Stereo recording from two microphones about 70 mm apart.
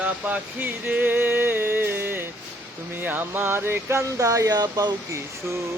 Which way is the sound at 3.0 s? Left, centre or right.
Right.